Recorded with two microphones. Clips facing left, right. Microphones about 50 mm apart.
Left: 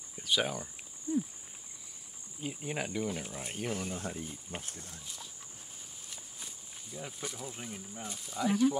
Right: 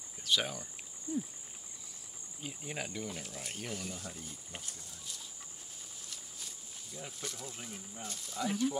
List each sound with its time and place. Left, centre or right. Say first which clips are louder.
0.2 s speech: left 2 dB; centre
2.4 s speech: left 5 dB; centre; by 4.2 s left
4.2 s speech: left 6 dB; left
4.6 s speech: left 4 dB; left
6.0 s walk: left 1 dB; centre
8.0 s speech: left 3 dB; centre